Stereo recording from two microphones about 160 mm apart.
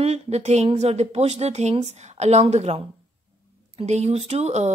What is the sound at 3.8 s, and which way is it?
Speech, 40° right (ahead or behind).